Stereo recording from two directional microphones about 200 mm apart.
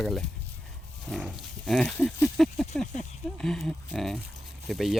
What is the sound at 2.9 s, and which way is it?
Speech, 35° left (ahead or behind).